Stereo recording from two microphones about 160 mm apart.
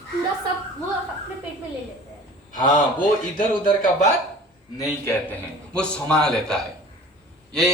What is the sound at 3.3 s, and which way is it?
Speech, 60° left (ahead or behind).